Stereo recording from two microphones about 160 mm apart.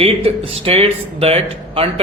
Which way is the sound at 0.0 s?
35° right (ahead or behind).